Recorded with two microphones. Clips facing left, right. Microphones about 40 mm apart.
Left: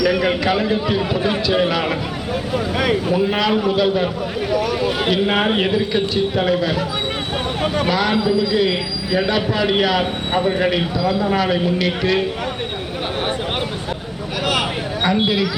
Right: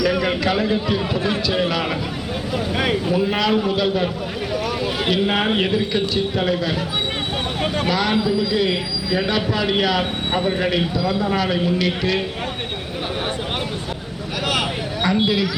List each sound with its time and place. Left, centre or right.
0.0 s a man's voice: centre
15.0 s a man's voice: centre